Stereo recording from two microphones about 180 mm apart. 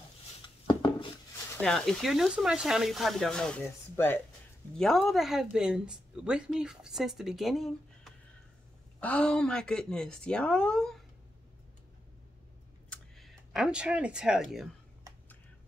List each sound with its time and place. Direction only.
0.7 s dishes: 25° left (ahead or behind)
1.6 s a woman's voice: centre (ahead or behind)
12.9 s speech: centre (ahead or behind)